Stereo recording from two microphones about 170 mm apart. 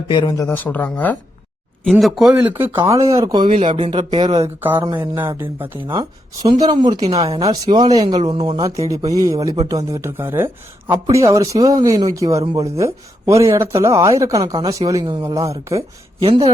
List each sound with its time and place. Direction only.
0.1 s speech: 25° left (ahead or behind); by 4.4 s 30° right (ahead or behind)
4.4 s speech: 10° right (ahead or behind)
5.9 s speech: 25° right (ahead or behind)
16.2 s a man's voice: 30° right (ahead or behind)